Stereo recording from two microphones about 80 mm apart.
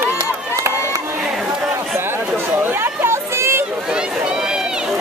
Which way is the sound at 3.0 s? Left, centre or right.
Right.